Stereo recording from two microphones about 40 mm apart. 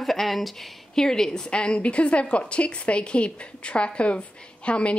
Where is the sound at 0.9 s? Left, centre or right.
Centre.